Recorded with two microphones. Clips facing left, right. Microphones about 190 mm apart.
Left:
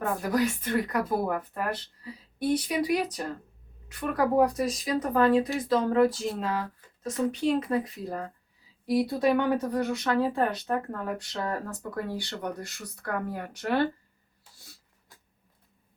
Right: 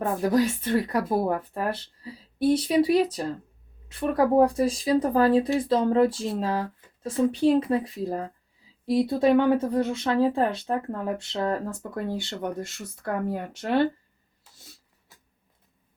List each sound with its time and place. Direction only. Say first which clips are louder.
0.2 s a woman's voice: right 4 dB; 25° right (ahead or behind)